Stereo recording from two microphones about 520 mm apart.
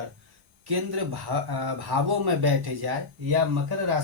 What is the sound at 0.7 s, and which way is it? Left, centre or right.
Speech, right.